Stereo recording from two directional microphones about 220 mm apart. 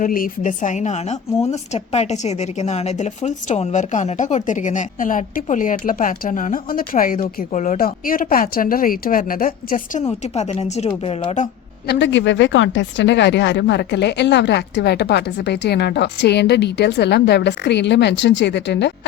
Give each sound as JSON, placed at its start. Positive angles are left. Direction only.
{"t": 0.0, "sound": "a woman's voice", "side_deg": 40}
{"t": 11.9, "sound": "a woman's voice", "side_deg": 55}